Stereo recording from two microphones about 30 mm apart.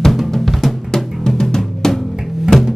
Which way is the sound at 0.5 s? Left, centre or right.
Centre.